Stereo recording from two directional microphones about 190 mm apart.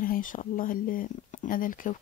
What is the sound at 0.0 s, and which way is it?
A woman's voice, 45° left (ahead or behind).